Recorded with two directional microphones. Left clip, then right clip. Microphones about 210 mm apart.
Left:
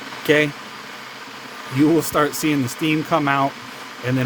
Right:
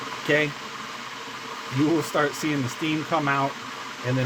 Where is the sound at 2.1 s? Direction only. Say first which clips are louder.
Left 5 dB; 40° left (ahead or behind).